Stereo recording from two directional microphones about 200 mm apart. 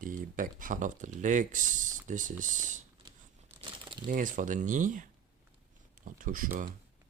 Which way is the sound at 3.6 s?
20° right (ahead or behind).